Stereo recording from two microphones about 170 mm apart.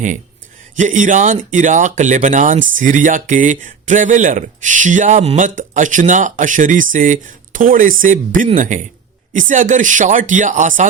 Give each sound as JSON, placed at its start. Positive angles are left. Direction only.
{"t": 0.8, "sound": "speech", "side_deg": -50}